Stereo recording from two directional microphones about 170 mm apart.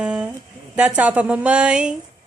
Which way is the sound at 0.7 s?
5° right (ahead or behind).